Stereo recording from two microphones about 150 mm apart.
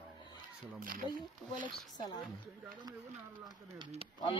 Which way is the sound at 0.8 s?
70° right (ahead or behind).